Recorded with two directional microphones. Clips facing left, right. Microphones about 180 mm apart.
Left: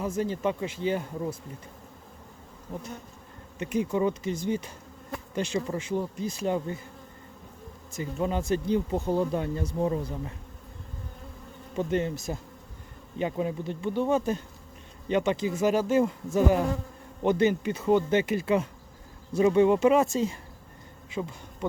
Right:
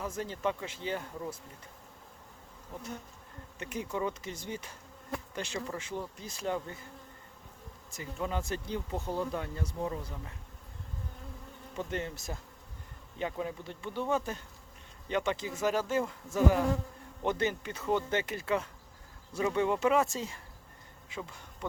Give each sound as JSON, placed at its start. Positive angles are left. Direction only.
{"t": 0.0, "sound": "bee", "side_deg": 10}
{"t": 3.6, "sound": "bee", "side_deg": 15}
{"t": 7.9, "sound": "speech", "side_deg": 20}
{"t": 11.7, "sound": "speech", "side_deg": 20}
{"t": 15.0, "sound": "bee", "side_deg": 15}
{"t": 19.3, "sound": "speech", "side_deg": 20}
{"t": 21.1, "sound": "bee", "side_deg": 20}